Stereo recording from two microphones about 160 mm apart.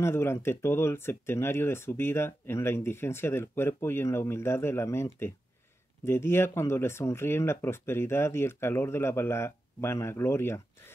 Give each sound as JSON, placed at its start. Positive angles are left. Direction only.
{"t": 0.0, "sound": "speech", "side_deg": 15}